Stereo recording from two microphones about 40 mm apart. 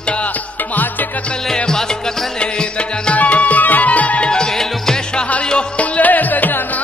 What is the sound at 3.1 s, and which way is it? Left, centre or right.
Music, left.